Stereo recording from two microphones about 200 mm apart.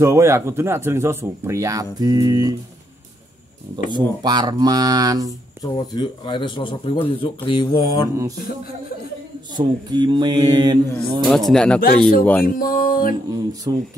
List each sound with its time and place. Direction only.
0.0 s speech: 15° right (ahead or behind)
3.9 s mantra: 20° right (ahead or behind)
5.6 s speech: 20° left (ahead or behind)
9.5 s mantra: 20° right (ahead or behind)
11.2 s speech: centre (ahead or behind)
12.4 s speech: 45° left (ahead or behind)
13.3 s mantra: 20° right (ahead or behind)